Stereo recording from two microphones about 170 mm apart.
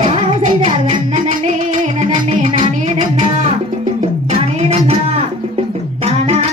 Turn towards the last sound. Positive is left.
turn(degrees=-40)  # may be behind; listen again after turning